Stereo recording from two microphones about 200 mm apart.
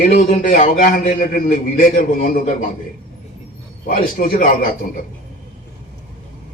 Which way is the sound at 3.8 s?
45° left (ahead or behind).